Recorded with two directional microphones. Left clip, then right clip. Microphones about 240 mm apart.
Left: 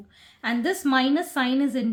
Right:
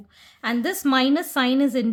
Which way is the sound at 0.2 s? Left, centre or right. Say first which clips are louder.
Right 2 dB; right.